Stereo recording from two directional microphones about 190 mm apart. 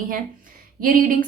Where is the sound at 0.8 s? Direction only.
45° right (ahead or behind).